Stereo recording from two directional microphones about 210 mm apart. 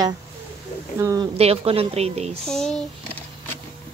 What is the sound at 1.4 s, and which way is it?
A woman's voice, 25° right (ahead or behind).